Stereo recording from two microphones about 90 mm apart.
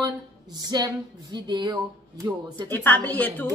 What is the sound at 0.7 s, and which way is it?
Speech, 50° right (ahead or behind).